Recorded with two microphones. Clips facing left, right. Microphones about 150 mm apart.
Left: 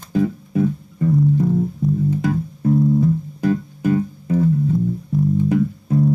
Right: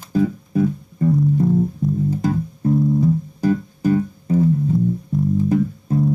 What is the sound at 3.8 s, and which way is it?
Music, 30° right (ahead or behind).